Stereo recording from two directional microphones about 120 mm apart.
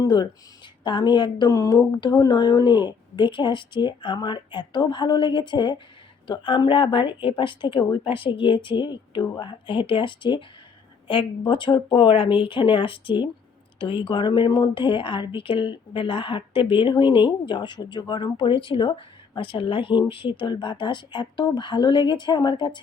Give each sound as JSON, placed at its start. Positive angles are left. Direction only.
{"t": 0.0, "sound": "speech", "side_deg": 35}